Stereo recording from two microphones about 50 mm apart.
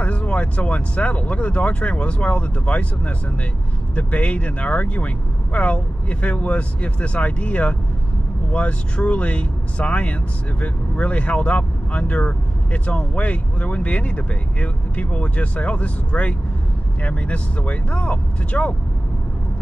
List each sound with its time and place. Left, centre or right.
0.0 s speech: left